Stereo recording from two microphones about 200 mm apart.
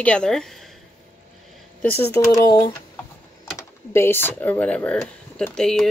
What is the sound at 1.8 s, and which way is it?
Speech, 10° left (ahead or behind).